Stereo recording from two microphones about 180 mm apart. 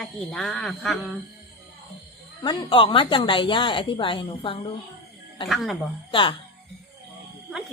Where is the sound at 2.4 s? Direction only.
25° left (ahead or behind).